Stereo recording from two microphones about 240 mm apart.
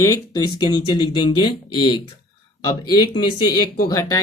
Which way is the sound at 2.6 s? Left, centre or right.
Centre.